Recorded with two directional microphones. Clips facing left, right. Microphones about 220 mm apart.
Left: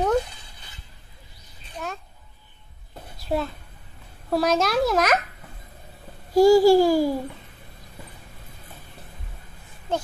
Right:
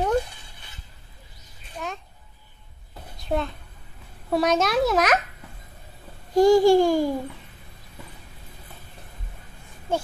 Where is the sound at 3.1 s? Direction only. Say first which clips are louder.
Even; 5° left (ahead or behind).